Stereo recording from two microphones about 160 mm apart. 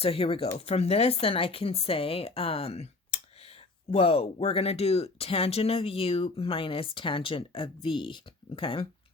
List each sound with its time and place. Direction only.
0.0 s speech: 40° left (ahead or behind)